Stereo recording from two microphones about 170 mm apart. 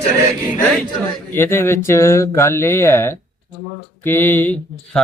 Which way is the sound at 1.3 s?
15° left (ahead or behind).